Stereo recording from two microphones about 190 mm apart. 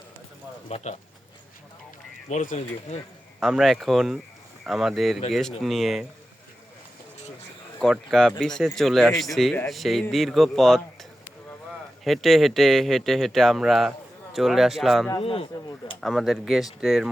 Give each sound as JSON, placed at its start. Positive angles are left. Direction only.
{"t": 2.3, "sound": "speech", "side_deg": 40}
{"t": 3.4, "sound": "speech", "side_deg": 0}
{"t": 7.8, "sound": "speech", "side_deg": 0}
{"t": 12.0, "sound": "speech", "side_deg": 0}
{"t": 15.2, "sound": "speech", "side_deg": 30}
{"t": 16.0, "sound": "speech", "side_deg": 0}